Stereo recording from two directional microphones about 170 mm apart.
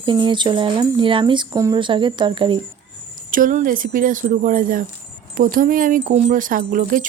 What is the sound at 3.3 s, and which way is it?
Speech, 50° right (ahead or behind).